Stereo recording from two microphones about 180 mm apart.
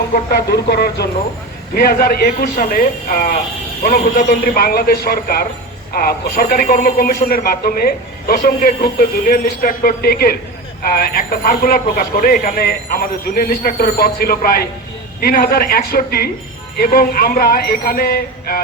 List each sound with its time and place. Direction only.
0.3 s speech: 65° left (ahead or behind)